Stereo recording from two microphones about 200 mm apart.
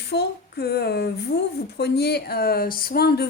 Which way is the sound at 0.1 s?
55° left (ahead or behind).